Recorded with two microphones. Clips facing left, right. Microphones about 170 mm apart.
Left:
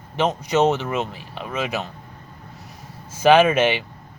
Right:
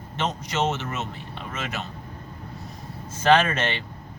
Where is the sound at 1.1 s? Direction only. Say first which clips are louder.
Left 2 dB; 90° left.